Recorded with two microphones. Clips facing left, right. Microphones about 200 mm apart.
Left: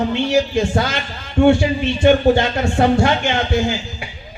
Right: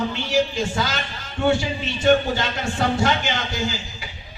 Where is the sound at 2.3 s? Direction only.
60° left (ahead or behind).